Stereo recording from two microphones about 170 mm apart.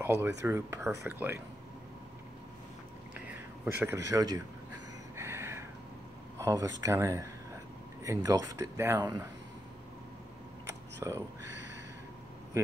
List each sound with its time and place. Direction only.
0.0 s speech: 15° right (ahead or behind)
3.3 s speech: 15° right (ahead or behind)
5.1 s a sound: 15° right (ahead or behind)
6.8 s speech: 20° right (ahead or behind)
11.0 s speech: 20° right (ahead or behind)